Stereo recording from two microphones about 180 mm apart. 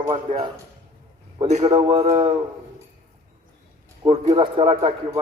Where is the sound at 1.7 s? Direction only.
30° right (ahead or behind).